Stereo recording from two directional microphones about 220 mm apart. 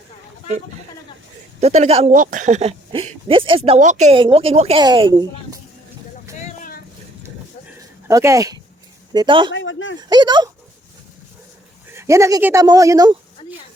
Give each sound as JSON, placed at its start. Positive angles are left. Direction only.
{"t": 1.6, "sound": "speech", "side_deg": -30}
{"t": 8.0, "sound": "speech", "side_deg": -15}
{"t": 9.5, "sound": "a sound", "side_deg": 60}
{"t": 10.0, "sound": "speech", "side_deg": -20}
{"t": 11.9, "sound": "speech", "side_deg": -15}